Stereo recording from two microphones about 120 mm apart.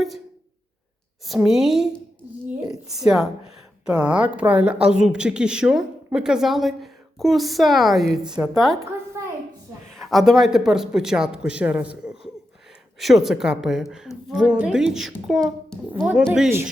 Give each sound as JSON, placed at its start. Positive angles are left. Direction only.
{"t": 1.5, "sound": "a woman's voice", "side_deg": -5}
{"t": 9.2, "sound": "a sound", "side_deg": -25}
{"t": 9.9, "sound": "a child's voice", "side_deg": 0}